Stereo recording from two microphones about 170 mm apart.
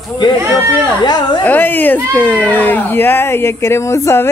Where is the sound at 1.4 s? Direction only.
10° left (ahead or behind).